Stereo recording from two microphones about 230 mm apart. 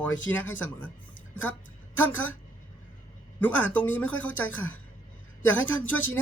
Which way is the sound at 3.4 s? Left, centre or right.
Centre.